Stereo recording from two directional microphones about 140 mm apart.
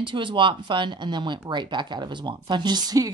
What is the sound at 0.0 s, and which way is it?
Speech, 35° right (ahead or behind).